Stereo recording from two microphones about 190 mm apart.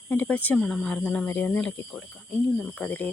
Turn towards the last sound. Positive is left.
turn(degrees=5)  # may be behind; listen again after turning